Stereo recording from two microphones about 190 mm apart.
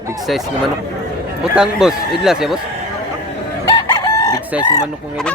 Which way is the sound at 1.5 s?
5° right (ahead or behind).